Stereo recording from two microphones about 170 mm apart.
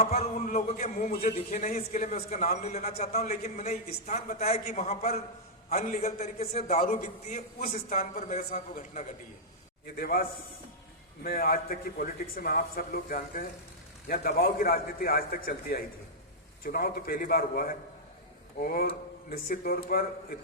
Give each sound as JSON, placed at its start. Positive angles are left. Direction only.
{"t": 0.0, "sound": "a man's voice", "side_deg": 40}
{"t": 9.8, "sound": "a man's voice", "side_deg": 60}